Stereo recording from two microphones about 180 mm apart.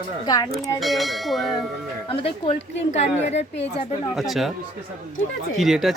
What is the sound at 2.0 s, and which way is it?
A woman's voice, 30° left (ahead or behind).